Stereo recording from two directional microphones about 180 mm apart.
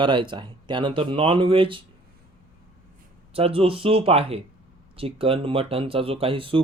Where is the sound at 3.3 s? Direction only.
30° right (ahead or behind).